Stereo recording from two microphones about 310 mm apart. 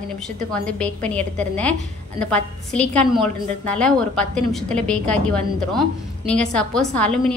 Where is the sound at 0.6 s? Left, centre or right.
Centre.